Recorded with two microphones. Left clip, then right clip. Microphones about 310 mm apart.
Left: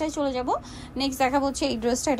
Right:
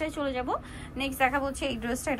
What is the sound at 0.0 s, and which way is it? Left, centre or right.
A woman's voice, centre.